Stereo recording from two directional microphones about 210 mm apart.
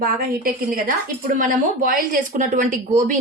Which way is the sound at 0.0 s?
40° right (ahead or behind).